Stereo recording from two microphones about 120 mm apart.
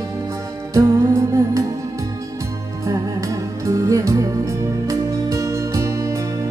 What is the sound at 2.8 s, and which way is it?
Music, 25° right (ahead or behind).